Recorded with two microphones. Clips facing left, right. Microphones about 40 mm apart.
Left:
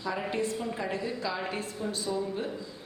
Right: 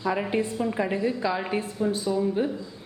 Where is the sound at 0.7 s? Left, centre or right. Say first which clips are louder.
Right 7 dB; right.